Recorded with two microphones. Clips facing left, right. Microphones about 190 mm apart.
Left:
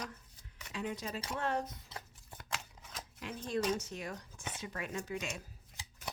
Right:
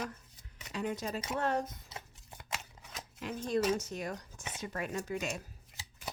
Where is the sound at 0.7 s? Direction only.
45° right (ahead or behind).